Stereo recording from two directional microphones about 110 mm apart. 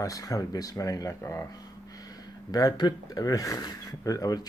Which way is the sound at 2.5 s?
35° left (ahead or behind).